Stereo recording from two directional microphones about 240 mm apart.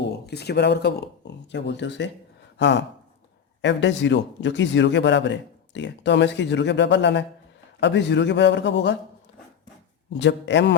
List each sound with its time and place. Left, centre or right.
0.0 s a man's voice: left
10.1 s a man's voice: left